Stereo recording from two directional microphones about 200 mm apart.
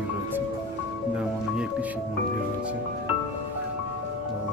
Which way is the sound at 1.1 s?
5° right (ahead or behind).